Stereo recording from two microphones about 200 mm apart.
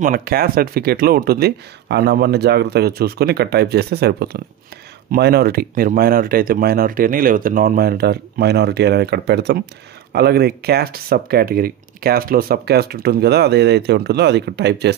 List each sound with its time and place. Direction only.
0.0 s speech: 45° right (ahead or behind)